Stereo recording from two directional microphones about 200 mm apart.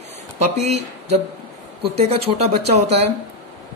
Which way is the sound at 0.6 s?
35° right (ahead or behind).